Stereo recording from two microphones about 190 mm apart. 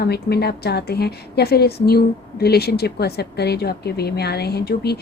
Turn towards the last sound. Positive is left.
turn(degrees=60)  # may be behind; listen again after turning